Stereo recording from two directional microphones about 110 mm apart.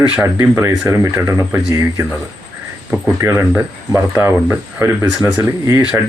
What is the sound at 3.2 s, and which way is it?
Speech, 25° right (ahead or behind).